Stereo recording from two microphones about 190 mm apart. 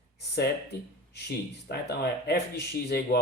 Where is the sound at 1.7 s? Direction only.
60° left (ahead or behind).